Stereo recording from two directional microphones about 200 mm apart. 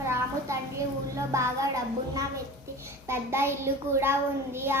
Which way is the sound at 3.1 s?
10° right (ahead or behind).